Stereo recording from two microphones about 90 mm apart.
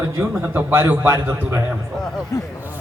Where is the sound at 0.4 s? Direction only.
25° right (ahead or behind).